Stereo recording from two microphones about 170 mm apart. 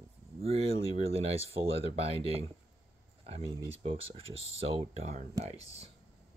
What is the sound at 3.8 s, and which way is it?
Speech, 35° right (ahead or behind).